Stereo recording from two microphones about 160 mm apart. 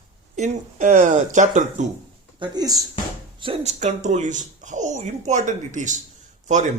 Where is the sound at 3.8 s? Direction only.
50° right (ahead or behind).